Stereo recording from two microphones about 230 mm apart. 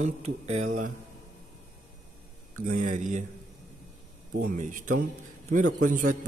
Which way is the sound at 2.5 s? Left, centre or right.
Right.